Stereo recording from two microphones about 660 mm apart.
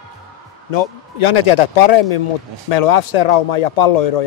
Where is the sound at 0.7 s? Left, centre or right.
Left.